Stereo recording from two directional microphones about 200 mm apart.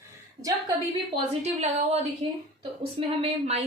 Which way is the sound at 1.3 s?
30° right (ahead or behind).